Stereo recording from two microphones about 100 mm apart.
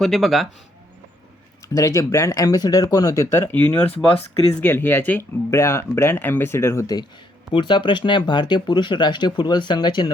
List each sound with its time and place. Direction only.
0.0 s a man's voice: centre (ahead or behind)
1.6 s speech: 35° left (ahead or behind)
7.5 s speech: 50° left (ahead or behind)